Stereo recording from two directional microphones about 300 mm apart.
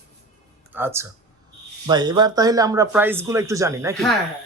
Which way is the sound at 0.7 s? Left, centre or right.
Centre.